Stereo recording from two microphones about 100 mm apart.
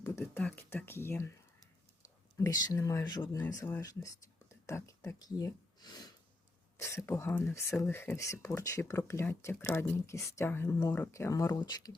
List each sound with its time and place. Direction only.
0.0 s beatboxing: 35° left (ahead or behind)
0.3 s speech: 20° left (ahead or behind)
2.4 s speech: 35° left (ahead or behind)
3.1 s speech: 45° left (ahead or behind)
3.8 s speech: 30° left (ahead or behind)
6.7 s speech: 30° left (ahead or behind)
7.5 s speech: 30° left (ahead or behind)
11.6 s speech: 45° left (ahead or behind)